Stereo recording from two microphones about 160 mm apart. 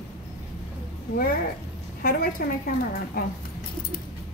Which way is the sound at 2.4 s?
70° left (ahead or behind).